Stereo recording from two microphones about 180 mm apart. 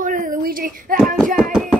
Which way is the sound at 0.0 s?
45° right (ahead or behind).